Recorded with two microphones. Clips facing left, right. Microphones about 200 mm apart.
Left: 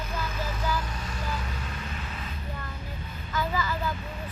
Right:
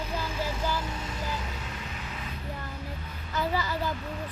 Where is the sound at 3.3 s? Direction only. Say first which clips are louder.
Even; 35° right (ahead or behind).